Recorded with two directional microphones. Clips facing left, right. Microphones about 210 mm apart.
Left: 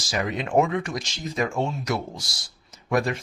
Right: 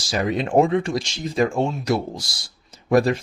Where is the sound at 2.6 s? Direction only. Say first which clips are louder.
Right 6 dB; 35° right (ahead or behind).